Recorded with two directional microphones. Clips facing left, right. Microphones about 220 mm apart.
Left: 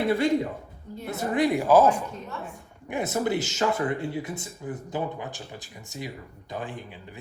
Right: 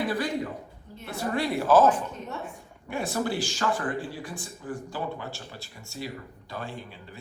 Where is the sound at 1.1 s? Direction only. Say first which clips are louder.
Left 4 dB; 20° left (ahead or behind).